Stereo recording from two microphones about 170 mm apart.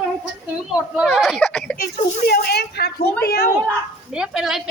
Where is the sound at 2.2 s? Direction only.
70° left (ahead or behind).